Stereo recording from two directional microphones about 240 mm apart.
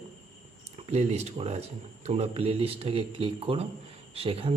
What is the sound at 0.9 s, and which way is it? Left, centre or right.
Speech, right.